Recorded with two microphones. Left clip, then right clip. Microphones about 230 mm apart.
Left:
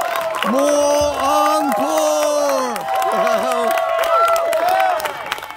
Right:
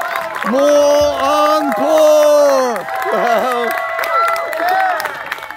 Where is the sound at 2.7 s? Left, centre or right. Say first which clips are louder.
Even; left.